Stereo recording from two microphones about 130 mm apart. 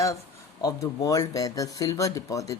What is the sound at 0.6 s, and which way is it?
Speech, 25° left (ahead or behind).